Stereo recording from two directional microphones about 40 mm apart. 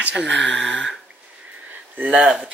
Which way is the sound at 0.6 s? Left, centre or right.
Centre.